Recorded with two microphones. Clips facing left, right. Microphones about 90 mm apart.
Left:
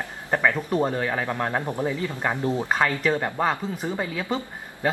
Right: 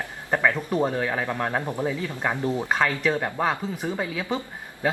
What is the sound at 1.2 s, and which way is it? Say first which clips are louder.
Speech: even; 15° left (ahead or behind).